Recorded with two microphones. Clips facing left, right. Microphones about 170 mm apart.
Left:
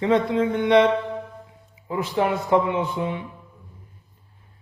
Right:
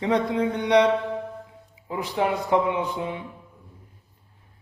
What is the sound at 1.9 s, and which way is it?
A man's voice, 15° right (ahead or behind).